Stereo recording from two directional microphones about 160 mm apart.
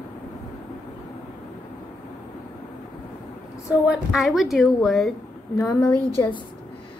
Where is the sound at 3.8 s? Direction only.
5° right (ahead or behind).